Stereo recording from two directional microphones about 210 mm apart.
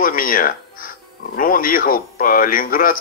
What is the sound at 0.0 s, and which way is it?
Speech, 40° left (ahead or behind).